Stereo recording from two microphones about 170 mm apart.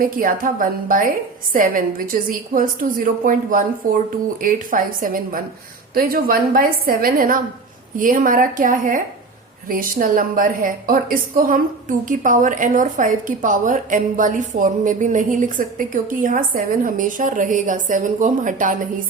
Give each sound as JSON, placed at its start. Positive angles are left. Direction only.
{"t": 0.0, "sound": "a woman's voice", "side_deg": -55}